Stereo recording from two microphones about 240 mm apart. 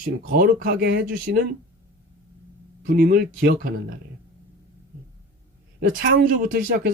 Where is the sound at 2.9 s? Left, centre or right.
Right.